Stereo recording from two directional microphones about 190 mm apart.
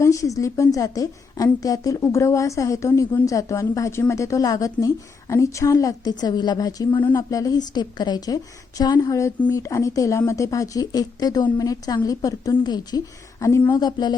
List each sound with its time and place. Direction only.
0.0 s a woman's voice: 15° left (ahead or behind)